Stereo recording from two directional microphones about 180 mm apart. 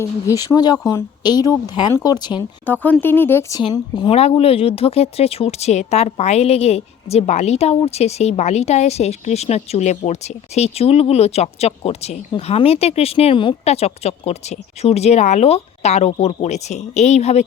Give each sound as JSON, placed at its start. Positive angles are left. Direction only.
{"t": 0.0, "sound": "speech", "side_deg": 20}
{"t": 2.6, "sound": "speech", "side_deg": 10}
{"t": 3.6, "sound": "a woman's voice", "side_deg": 25}